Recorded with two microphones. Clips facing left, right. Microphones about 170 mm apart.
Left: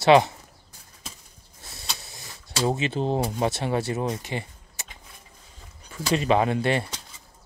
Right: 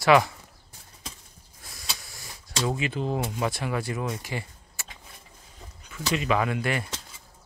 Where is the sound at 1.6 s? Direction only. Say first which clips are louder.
Left 3 dB; 25° left (ahead or behind).